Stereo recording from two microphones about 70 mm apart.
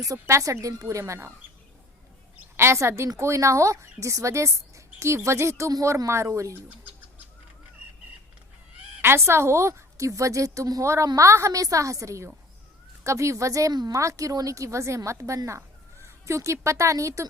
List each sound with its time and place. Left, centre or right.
0.0 s speech: right
2.6 s a woman's voice: right
9.0 s a woman's voice: right